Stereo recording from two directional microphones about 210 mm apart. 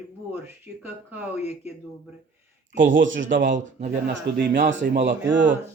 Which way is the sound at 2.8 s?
60° right (ahead or behind).